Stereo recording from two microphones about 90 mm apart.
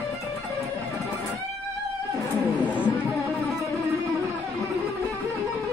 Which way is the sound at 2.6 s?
15° right (ahead or behind).